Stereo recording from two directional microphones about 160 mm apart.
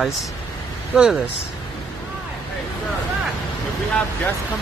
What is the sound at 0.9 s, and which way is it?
Speech, 5° right (ahead or behind).